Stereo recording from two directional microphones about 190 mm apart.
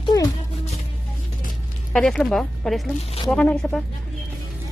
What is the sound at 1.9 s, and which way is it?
Speech, 5° left (ahead or behind).